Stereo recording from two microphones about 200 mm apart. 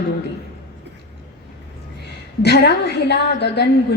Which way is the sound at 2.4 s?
55° left (ahead or behind).